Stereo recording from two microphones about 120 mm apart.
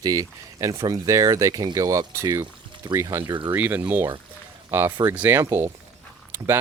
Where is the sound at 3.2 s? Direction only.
40° right (ahead or behind).